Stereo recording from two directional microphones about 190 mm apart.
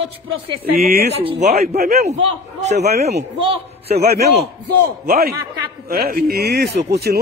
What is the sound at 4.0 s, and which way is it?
Speech, 55° right (ahead or behind).